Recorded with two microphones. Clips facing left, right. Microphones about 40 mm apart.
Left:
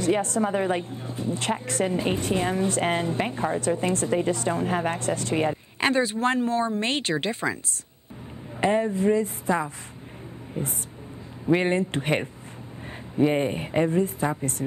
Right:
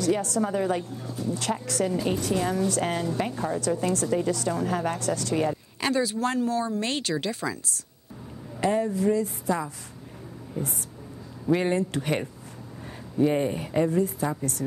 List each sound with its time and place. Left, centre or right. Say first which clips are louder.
0.0 s a woman's voice: left 2 dB; left